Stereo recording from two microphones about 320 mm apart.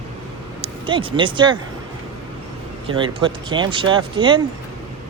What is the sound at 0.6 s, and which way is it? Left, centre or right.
Speech, centre.